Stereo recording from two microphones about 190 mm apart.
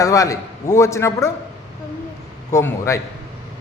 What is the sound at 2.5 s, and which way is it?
Speech, 15° left (ahead or behind).